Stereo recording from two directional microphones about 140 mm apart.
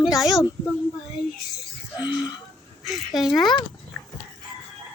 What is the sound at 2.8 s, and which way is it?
Speech, centre (ahead or behind).